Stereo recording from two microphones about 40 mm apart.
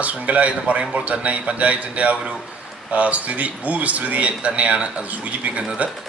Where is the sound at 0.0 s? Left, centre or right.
Right.